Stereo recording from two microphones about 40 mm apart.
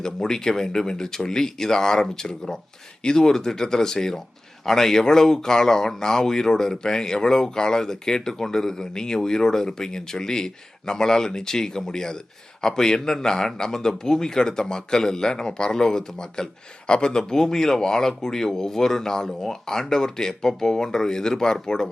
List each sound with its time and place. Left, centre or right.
0.0 s a man's voice: centre